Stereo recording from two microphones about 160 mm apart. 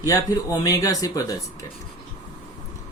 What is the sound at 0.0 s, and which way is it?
Speech, 20° left (ahead or behind).